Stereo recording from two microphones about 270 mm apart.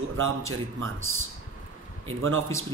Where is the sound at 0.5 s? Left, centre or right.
Right.